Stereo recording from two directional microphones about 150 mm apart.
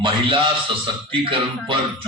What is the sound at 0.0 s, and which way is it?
A man's voice, 35° right (ahead or behind).